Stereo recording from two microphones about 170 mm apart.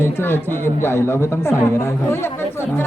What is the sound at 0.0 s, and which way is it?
A woman's voice, 15° left (ahead or behind).